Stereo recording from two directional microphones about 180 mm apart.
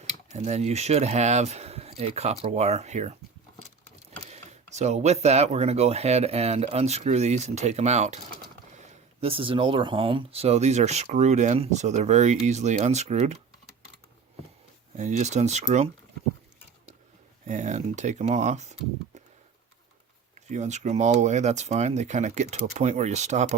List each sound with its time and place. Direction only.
0.0 s speech: 40° right (ahead or behind)
4.3 s speech: 40° right (ahead or behind)
14.9 s speech: 40° right (ahead or behind)
17.4 s speech: 45° right (ahead or behind)
20.3 s speech: 40° right (ahead or behind)